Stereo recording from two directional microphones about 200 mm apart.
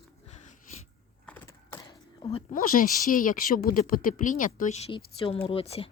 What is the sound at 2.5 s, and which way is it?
Speech, 45° left (ahead or behind).